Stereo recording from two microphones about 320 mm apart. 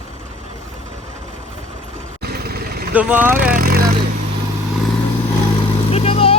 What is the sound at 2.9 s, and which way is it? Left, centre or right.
Speech, centre.